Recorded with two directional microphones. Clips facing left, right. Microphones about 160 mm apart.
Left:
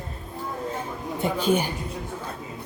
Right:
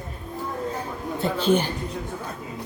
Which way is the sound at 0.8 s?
15° left (ahead or behind).